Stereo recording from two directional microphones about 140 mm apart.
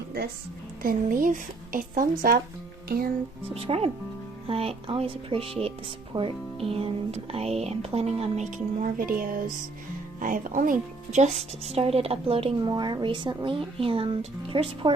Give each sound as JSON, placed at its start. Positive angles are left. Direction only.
{"t": 0.8, "sound": "speech", "side_deg": -85}
{"t": 2.9, "sound": "music", "side_deg": -90}
{"t": 3.5, "sound": "a woman's voice", "side_deg": -45}
{"t": 6.1, "sound": "a woman's voice", "side_deg": -30}
{"t": 6.7, "sound": "a woman's voice", "side_deg": -45}